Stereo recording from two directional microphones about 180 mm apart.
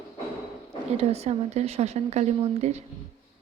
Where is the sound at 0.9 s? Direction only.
35° right (ahead or behind).